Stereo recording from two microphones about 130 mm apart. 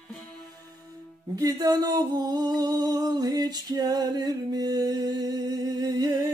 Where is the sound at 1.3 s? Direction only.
30° right (ahead or behind).